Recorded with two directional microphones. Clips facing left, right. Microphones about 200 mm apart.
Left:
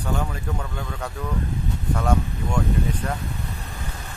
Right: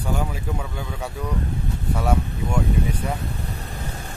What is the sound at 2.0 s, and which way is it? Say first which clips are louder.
Speech: even; 5° right (ahead or behind).